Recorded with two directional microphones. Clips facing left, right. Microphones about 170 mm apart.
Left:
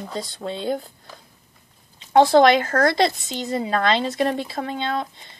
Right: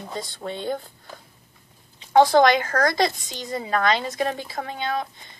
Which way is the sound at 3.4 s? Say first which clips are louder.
Left 4 dB; 25° left (ahead or behind).